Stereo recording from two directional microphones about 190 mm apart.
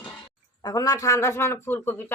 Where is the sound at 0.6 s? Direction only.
20° left (ahead or behind).